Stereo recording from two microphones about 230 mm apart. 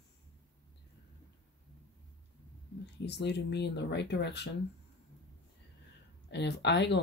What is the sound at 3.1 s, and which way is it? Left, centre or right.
Speech, left.